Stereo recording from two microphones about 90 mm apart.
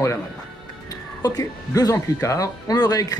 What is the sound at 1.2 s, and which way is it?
Speech, 45° left (ahead or behind).